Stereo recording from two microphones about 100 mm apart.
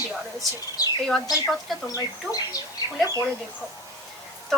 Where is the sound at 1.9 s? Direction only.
35° left (ahead or behind).